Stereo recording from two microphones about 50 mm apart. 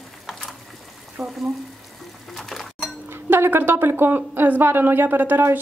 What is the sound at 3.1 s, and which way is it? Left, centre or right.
A woman's voice, right.